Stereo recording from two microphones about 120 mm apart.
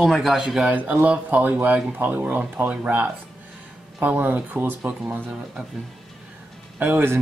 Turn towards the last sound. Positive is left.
turn(degrees=-20)  # may be behind; listen again after turning